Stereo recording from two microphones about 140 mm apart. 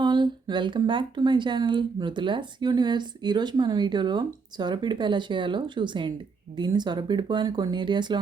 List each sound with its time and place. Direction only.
0.0 s speech: 30° right (ahead or behind)